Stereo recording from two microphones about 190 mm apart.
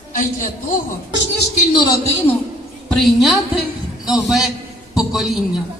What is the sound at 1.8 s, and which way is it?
Speech, 20° left (ahead or behind).